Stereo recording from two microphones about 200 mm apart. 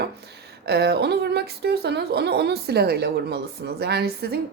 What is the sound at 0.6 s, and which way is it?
A woman's voice, 55° right (ahead or behind).